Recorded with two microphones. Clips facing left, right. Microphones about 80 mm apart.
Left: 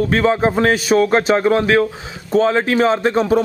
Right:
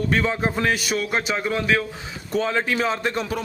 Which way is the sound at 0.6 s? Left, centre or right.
Left.